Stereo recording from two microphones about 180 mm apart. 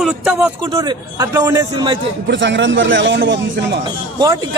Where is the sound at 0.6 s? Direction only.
25° right (ahead or behind).